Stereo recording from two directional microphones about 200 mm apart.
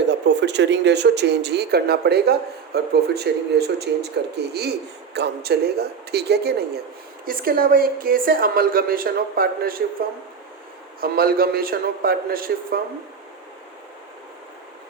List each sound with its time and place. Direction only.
0.0 s a woman's voice: 60° right (ahead or behind)
11.0 s a woman's voice: 50° right (ahead or behind)